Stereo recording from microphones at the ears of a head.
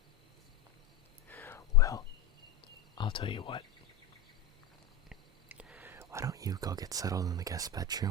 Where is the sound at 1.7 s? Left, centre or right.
Left.